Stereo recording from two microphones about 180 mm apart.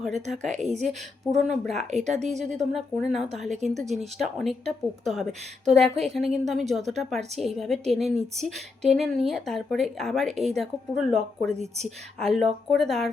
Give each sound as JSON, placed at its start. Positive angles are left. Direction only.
{"t": 0.0, "sound": "a woman's voice", "side_deg": 0}
{"t": 0.4, "sound": "a woman's voice", "side_deg": -40}
{"t": 0.9, "sound": "a woman's voice", "side_deg": 0}
{"t": 1.9, "sound": "a woman's voice", "side_deg": -40}
{"t": 2.4, "sound": "a woman's voice", "side_deg": 0}